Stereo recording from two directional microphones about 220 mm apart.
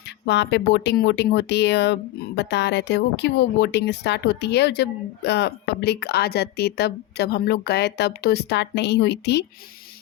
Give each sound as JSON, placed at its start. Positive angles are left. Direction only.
{"t": 0.3, "sound": "speech", "side_deg": 50}